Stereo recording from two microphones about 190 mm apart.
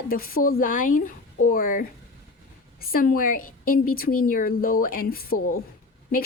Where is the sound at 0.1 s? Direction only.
50° left (ahead or behind).